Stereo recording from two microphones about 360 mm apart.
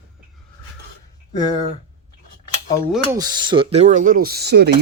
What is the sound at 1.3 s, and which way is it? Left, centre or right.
Speech, centre.